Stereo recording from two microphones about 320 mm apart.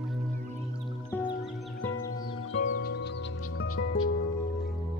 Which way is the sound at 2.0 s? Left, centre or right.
Centre.